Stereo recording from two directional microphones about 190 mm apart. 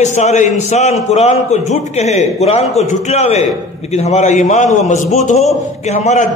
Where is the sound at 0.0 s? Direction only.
40° left (ahead or behind).